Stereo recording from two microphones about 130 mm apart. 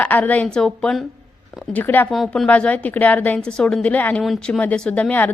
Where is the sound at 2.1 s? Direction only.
Centre (ahead or behind).